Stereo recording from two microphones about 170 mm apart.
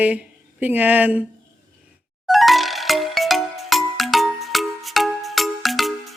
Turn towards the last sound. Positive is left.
turn(degrees=0)  # may be behind; listen again after turning